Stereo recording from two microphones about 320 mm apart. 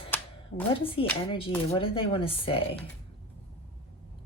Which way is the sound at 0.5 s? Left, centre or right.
Left.